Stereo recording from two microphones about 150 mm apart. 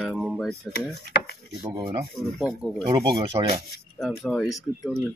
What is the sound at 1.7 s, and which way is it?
Speech, 30° right (ahead or behind).